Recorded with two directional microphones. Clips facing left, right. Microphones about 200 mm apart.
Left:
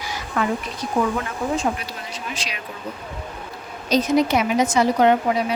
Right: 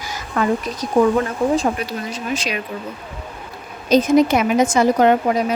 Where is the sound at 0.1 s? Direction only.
40° right (ahead or behind).